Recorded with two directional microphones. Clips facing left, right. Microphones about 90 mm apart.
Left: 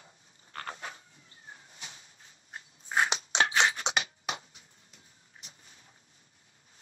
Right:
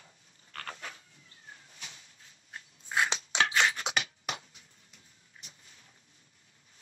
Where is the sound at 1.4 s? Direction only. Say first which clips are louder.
Left 2 dB; 25° left (ahead or behind).